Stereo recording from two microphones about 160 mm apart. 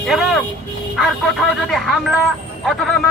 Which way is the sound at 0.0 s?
Centre (ahead or behind).